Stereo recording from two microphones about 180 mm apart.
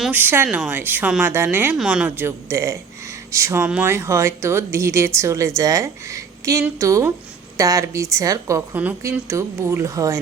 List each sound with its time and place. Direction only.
0.0 s speech: 10° right (ahead or behind)